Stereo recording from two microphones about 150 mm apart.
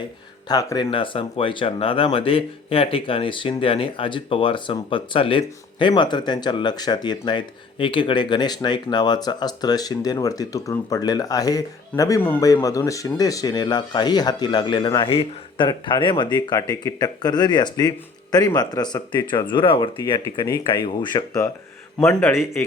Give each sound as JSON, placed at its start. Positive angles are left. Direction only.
{"t": 0.4, "sound": "speech", "side_deg": 25}